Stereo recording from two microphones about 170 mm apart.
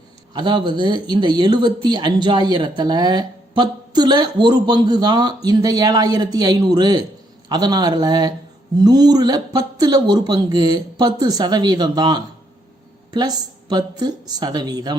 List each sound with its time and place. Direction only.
0.3 s speech: 25° right (ahead or behind)